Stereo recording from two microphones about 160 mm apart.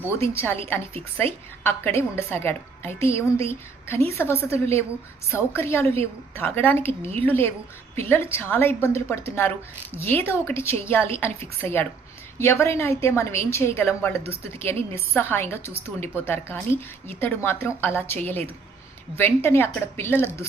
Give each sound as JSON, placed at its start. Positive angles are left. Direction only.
{"t": 0.1, "sound": "a woman's voice", "side_deg": 15}